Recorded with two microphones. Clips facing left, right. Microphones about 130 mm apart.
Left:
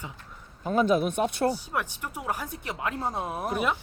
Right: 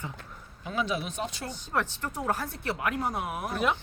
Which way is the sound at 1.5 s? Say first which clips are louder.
Even; 10° left (ahead or behind).